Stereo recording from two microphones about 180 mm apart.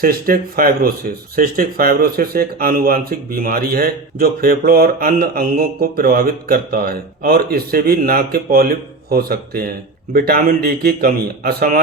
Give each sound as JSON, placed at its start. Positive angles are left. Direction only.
{"t": 0.0, "sound": "speech", "side_deg": -55}